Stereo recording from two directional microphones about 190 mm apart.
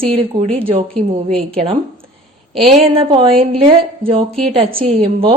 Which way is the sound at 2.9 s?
30° right (ahead or behind).